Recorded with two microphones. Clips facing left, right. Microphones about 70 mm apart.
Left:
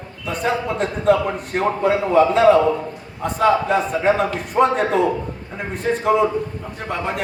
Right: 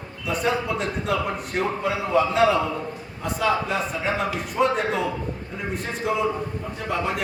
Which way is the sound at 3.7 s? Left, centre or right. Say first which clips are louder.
Left 8 dB; left.